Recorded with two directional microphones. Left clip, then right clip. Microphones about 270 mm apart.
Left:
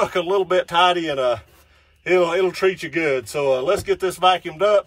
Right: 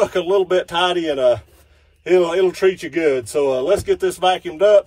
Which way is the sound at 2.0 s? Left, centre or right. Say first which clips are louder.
Right 2 dB; centre.